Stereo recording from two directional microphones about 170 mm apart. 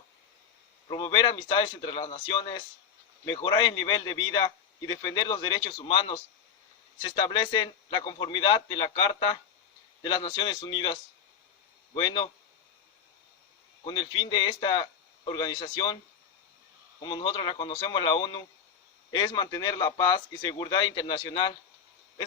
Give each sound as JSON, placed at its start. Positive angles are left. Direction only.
{"t": 0.9, "sound": "a man's voice", "side_deg": 25}
{"t": 13.8, "sound": "a man's voice", "side_deg": 25}
{"t": 17.0, "sound": "a man's voice", "side_deg": 25}